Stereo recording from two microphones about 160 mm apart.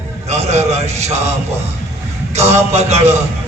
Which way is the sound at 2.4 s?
45° right (ahead or behind).